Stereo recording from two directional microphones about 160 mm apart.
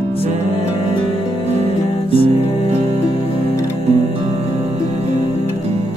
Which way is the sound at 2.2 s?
40° right (ahead or behind).